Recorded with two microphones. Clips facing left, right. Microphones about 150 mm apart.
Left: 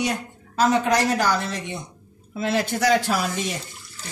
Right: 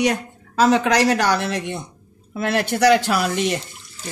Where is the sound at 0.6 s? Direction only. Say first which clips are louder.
Right 3 dB; 90° right; by 3.6 s 70° right (ahead or behind).